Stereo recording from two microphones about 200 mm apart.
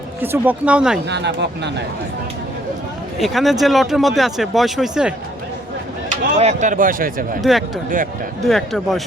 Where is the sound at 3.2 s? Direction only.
Centre (ahead or behind).